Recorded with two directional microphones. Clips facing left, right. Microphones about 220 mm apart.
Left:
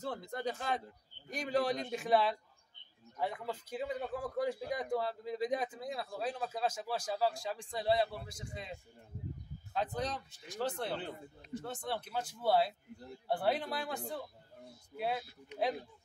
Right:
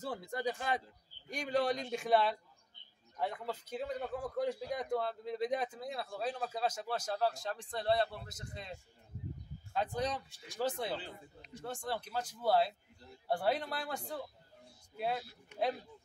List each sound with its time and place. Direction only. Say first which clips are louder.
0.0 s speech: right 1 dB; centre (ahead or behind)
9.9 s speech: right 2 dB; centre (ahead or behind)